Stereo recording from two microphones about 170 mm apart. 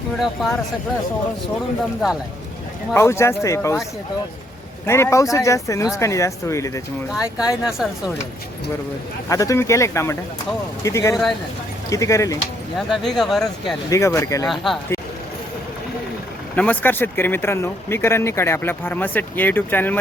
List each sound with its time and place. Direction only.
0.4 s speech: centre (ahead or behind)
2.9 s speech: 15° left (ahead or behind)
4.9 s speech: 15° left (ahead or behind)
7.1 s speech: 5° right (ahead or behind)
9.3 s speech: 20° left (ahead or behind)
11.1 s speech: centre (ahead or behind)
11.9 s speech: 20° left (ahead or behind)
12.9 s speech: centre (ahead or behind)
13.9 s speech: 15° left (ahead or behind)
14.4 s speech: centre (ahead or behind)
16.6 s speech: 10° left (ahead or behind)